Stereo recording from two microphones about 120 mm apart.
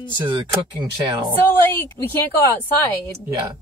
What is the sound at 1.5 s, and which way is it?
Speech, 15° left (ahead or behind).